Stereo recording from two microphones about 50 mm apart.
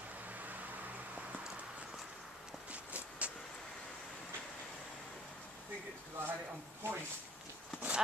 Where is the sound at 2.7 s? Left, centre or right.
Right.